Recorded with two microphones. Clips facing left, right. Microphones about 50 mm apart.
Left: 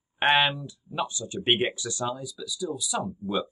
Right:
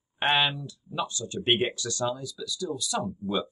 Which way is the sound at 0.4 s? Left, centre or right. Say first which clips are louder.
Left 2 dB; left.